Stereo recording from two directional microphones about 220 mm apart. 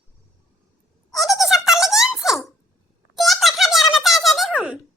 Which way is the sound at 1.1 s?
Centre (ahead or behind).